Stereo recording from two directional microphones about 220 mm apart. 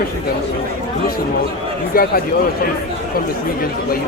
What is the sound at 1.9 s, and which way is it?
Speech, 45° left (ahead or behind).